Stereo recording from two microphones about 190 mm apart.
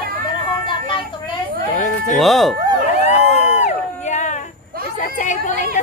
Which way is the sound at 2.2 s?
Centre (ahead or behind).